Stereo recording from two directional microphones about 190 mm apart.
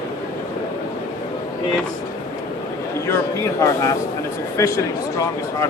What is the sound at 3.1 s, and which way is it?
Speech, 15° left (ahead or behind).